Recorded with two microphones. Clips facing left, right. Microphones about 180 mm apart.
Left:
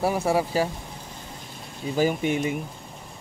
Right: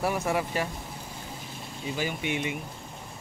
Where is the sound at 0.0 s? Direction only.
30° left (ahead or behind).